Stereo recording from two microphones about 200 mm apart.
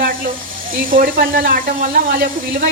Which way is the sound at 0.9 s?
45° right (ahead or behind).